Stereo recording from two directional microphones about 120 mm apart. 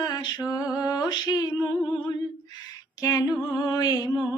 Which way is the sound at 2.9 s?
30° left (ahead or behind).